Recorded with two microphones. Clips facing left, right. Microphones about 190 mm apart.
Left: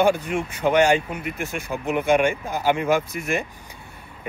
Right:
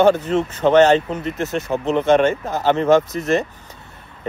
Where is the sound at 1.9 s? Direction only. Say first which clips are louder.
Right 4 dB; 10° left (ahead or behind).